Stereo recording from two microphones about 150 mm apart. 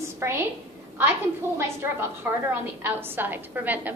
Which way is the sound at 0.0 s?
15° right (ahead or behind).